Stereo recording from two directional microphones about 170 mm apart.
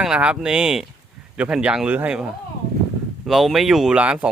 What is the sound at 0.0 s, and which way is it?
Speech, 5° right (ahead or behind).